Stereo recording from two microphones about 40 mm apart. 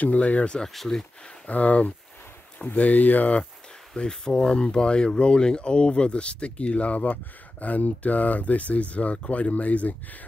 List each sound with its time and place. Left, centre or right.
0.0 s speech: left
0.7 s speech: centre
1.5 s speech: left
3.9 s speech: centre; by 9.9 s left